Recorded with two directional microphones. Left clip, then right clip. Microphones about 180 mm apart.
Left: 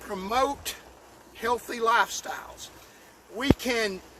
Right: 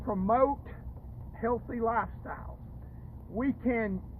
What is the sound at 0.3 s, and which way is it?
Speech, 35° left (ahead or behind).